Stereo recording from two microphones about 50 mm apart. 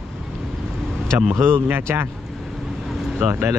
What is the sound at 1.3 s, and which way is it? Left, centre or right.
Speech, right.